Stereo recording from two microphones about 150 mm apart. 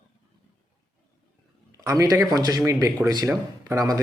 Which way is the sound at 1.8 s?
20° right (ahead or behind).